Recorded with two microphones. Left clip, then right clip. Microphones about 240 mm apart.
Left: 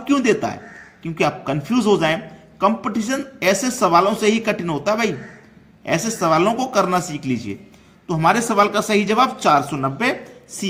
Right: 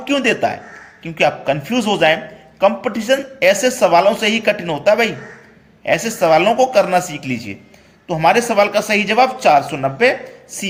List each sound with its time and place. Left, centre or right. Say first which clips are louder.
0.0 s speech: right 2 dB; centre